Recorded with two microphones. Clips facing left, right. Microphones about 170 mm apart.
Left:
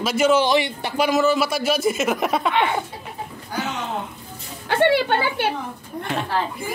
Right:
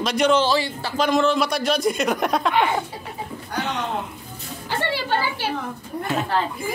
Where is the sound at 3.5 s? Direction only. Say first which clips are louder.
Right 1 dB; centre (ahead or behind).